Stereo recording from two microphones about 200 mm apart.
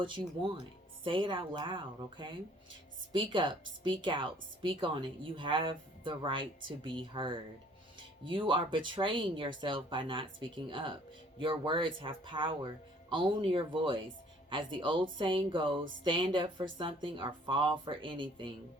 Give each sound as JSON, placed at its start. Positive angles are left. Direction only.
{"t": 1.0, "sound": "speech", "side_deg": -25}